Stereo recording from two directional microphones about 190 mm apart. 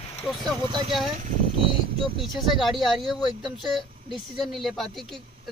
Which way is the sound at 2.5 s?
Centre (ahead or behind).